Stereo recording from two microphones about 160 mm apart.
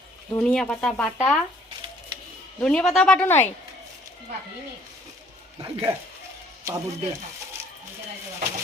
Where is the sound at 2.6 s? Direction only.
5° left (ahead or behind).